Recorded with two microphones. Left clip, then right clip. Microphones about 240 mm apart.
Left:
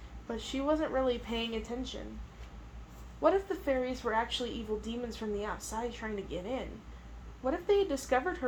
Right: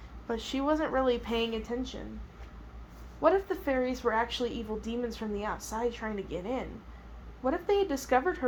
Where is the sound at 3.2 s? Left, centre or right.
Right.